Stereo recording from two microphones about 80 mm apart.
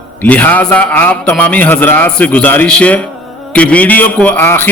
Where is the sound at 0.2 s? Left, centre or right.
Centre.